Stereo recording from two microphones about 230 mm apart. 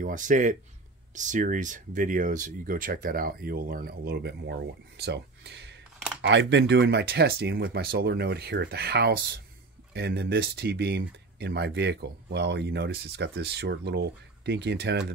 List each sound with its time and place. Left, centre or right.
0.0 s speech: right